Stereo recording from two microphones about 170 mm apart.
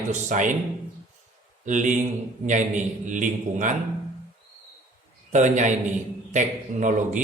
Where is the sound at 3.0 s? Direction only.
45° right (ahead or behind).